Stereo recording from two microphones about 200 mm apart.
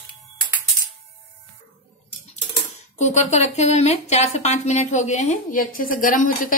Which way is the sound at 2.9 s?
35° left (ahead or behind).